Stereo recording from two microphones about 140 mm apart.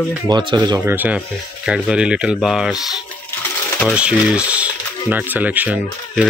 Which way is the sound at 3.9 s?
10° right (ahead or behind).